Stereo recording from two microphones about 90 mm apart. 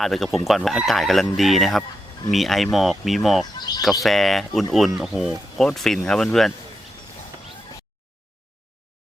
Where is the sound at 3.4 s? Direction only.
50° left (ahead or behind).